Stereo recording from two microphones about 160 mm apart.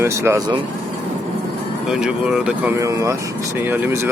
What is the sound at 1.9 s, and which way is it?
Speech, 5° right (ahead or behind).